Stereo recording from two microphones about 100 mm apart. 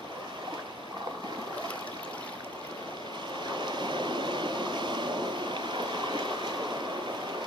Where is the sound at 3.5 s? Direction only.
50° right (ahead or behind).